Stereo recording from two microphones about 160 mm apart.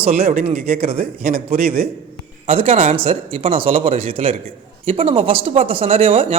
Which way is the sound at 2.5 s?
35° right (ahead or behind).